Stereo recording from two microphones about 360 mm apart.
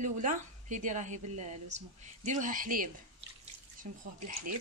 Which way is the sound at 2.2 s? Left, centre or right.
Right.